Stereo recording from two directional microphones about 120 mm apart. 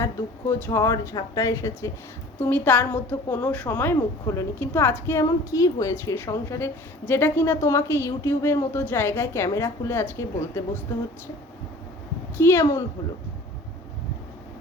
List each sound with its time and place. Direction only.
0.0 s a woman's voice: 25° left (ahead or behind)
2.4 s a woman's voice: 15° left (ahead or behind)
12.4 s a woman's voice: 20° left (ahead or behind)